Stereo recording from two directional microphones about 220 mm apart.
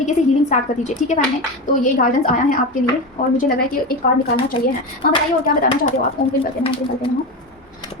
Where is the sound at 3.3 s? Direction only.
40° left (ahead or behind).